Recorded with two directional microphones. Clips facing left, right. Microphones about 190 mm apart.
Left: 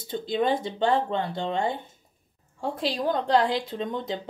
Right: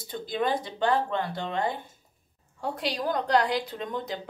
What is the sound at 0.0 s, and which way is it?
A woman's voice, 25° left (ahead or behind).